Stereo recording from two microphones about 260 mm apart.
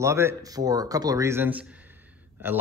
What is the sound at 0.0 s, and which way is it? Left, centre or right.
A man's voice, centre.